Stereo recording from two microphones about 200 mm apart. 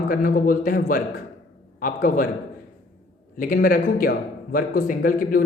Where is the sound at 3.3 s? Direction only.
45° left (ahead or behind).